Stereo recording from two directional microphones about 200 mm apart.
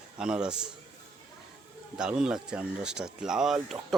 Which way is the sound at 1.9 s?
5° right (ahead or behind).